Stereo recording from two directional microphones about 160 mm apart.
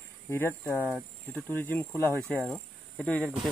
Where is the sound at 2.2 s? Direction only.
Centre (ahead or behind).